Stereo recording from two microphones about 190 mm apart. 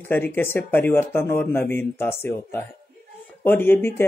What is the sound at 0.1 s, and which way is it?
Speech, 10° left (ahead or behind).